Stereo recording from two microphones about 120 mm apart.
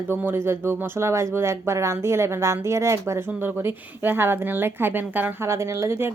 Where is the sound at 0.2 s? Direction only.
20° right (ahead or behind).